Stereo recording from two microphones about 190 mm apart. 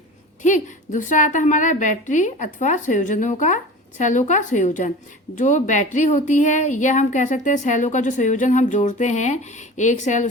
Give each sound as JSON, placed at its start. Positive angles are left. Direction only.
{"t": 0.4, "sound": "a woman's voice", "side_deg": 40}